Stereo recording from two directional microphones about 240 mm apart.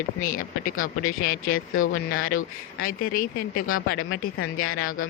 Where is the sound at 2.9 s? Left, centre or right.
Left.